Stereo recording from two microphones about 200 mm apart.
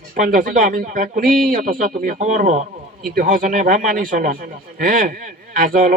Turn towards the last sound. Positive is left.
turn(degrees=-45)  # may be behind; listen again after turning